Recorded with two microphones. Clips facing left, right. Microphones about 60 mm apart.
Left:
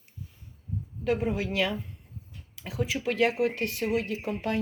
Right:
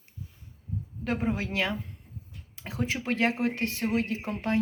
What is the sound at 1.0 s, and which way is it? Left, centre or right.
Speech, right.